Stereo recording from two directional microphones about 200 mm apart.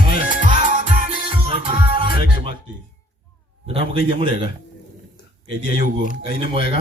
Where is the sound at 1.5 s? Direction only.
25° right (ahead or behind).